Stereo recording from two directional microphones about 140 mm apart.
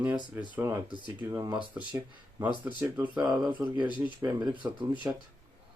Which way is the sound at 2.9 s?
30° right (ahead or behind).